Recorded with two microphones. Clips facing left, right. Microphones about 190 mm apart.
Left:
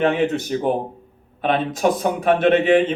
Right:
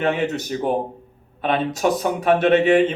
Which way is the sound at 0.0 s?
50° left (ahead or behind).